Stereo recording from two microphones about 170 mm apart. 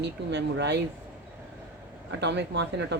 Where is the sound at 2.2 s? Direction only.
90° right.